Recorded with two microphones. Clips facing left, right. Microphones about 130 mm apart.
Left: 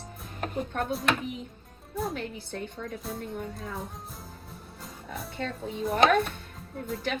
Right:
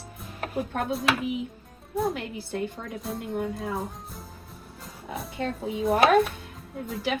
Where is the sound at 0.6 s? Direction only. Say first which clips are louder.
Right 3 dB; 5° right (ahead or behind).